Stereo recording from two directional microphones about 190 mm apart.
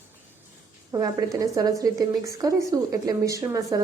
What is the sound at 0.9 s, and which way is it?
A woman's voice, 20° right (ahead or behind).